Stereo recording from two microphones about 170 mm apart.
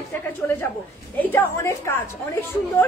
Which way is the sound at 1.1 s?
15° left (ahead or behind).